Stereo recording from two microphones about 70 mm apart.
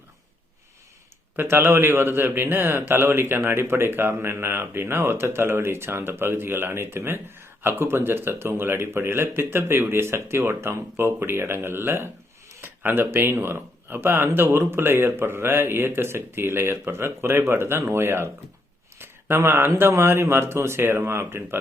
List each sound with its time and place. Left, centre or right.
1.4 s a man's voice: right